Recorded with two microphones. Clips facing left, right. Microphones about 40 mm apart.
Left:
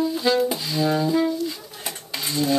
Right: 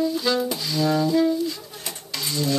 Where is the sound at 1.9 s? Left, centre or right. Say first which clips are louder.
Left 1 dB; left.